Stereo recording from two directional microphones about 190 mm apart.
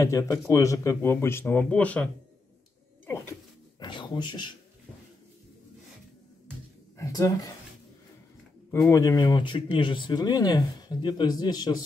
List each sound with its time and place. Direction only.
0.0 s a man's voice: 15° left (ahead or behind)
3.1 s a sound: 15° left (ahead or behind)
3.8 s speech: 25° left (ahead or behind)
7.0 s speech: 20° left (ahead or behind)
8.9 s speech: 15° left (ahead or behind)